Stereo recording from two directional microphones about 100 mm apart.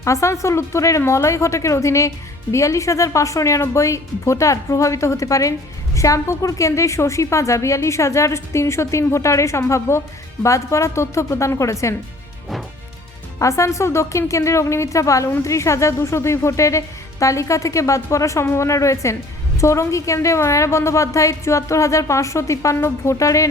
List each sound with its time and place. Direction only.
0.0 s a woman's voice: 30° left (ahead or behind)
13.4 s speech: 30° left (ahead or behind)